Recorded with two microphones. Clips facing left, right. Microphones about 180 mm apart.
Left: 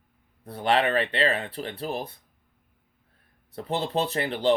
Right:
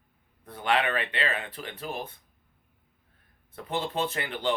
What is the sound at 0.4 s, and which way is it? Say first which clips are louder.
Speech: left 3 dB; 35° left (ahead or behind).